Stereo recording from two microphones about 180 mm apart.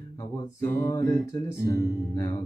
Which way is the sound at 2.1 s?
20° left (ahead or behind).